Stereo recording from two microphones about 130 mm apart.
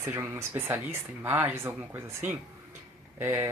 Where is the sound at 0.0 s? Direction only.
20° right (ahead or behind).